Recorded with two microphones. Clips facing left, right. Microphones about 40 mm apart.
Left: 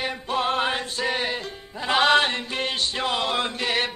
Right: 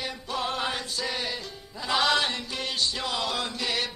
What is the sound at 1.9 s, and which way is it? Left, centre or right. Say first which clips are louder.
Chant: left 6 dB; left.